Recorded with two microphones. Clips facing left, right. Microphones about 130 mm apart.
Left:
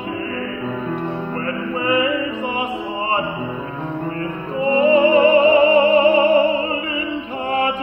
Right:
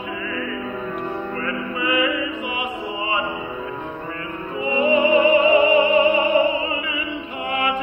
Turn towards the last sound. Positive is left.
turn(degrees=35)  # may be behind; listen again after turning